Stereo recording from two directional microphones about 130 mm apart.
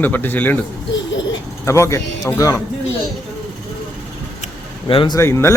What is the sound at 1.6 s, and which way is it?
Speech, 20° left (ahead or behind).